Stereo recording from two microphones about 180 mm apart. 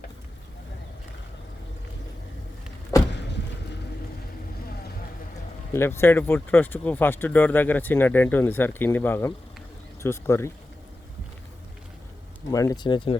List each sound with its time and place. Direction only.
5.7 s speech: 15° left (ahead or behind)
12.5 s speech: 20° left (ahead or behind)